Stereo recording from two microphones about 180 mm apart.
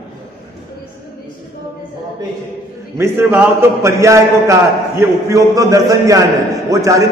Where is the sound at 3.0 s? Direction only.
10° right (ahead or behind).